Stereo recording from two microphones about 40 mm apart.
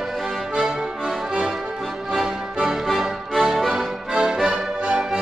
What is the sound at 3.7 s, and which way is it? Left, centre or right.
Music, centre.